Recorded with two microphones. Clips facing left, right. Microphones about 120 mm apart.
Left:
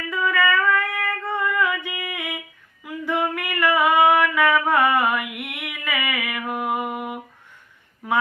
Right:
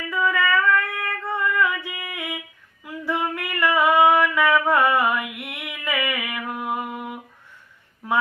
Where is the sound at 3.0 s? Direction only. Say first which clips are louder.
Left 2 dB; 15° left (ahead or behind).